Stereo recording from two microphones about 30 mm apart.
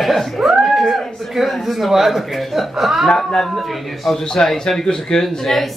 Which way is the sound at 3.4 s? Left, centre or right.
Centre.